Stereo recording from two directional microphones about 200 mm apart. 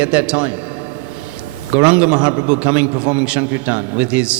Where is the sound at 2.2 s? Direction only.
20° right (ahead or behind).